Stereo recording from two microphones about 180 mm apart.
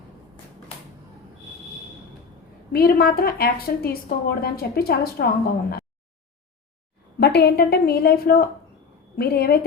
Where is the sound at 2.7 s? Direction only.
60° left (ahead or behind).